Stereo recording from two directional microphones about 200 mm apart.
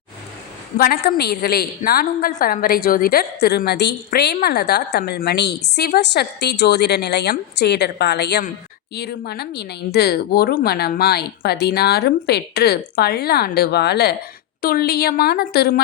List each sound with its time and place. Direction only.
0.8 s a woman's voice: 50° left (ahead or behind)